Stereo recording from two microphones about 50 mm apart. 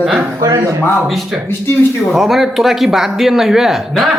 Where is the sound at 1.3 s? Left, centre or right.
Centre.